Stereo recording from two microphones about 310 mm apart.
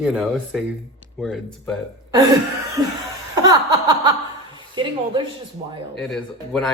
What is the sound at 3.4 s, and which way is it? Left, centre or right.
Chuckle, centre.